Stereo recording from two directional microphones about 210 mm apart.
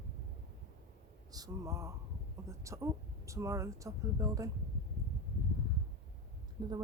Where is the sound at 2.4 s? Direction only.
15° right (ahead or behind).